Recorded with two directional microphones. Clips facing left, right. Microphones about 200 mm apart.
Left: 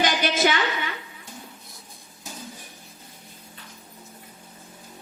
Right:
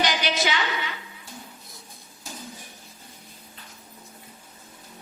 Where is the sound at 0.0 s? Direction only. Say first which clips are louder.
Left 3 dB; 50° left (ahead or behind).